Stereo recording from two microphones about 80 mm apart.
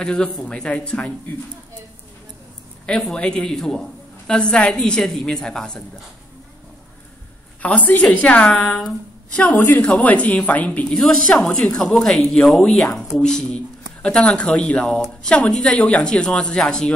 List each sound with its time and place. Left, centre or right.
0.0 s a woman's voice: centre
2.9 s a woman's voice: centre
7.6 s a woman's voice: centre
10.9 s a woman's voice: centre
14.9 s a woman's voice: centre